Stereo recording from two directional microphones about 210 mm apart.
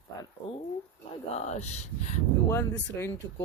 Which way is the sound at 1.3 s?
30° left (ahead or behind).